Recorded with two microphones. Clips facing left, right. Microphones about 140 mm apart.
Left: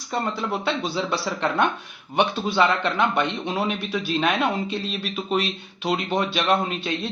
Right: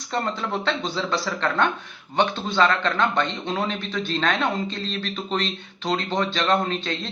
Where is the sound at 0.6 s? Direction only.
10° left (ahead or behind).